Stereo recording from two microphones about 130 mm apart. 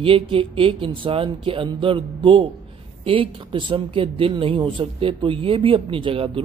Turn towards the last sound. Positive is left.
turn(degrees=-45)  # may be behind; listen again after turning